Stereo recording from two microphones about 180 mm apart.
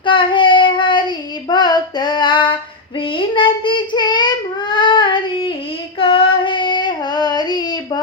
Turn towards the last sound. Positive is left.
turn(degrees=25)  # may be behind; listen again after turning